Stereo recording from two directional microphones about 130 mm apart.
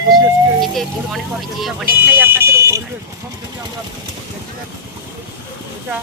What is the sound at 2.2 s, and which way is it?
Vehicle, 20° right (ahead or behind).